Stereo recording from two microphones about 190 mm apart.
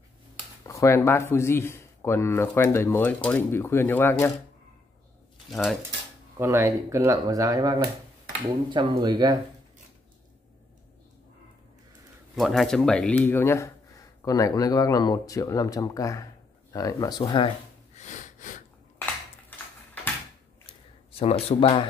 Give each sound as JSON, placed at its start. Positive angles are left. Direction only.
{"t": 0.7, "sound": "a man's voice", "side_deg": 15}
{"t": 5.5, "sound": "speech", "side_deg": 0}
{"t": 6.3, "sound": "speech", "side_deg": -15}
{"t": 12.4, "sound": "a man's voice", "side_deg": 0}
{"t": 17.9, "sound": "a sound", "side_deg": 40}
{"t": 21.2, "sound": "speech", "side_deg": 30}